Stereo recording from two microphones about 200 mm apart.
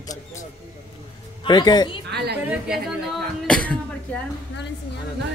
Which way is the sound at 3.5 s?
5° left (ahead or behind).